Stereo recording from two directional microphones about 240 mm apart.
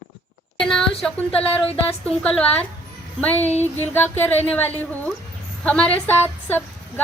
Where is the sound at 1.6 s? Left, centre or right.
Left.